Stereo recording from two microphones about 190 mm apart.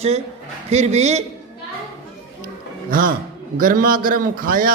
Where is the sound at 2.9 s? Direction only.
45° right (ahead or behind).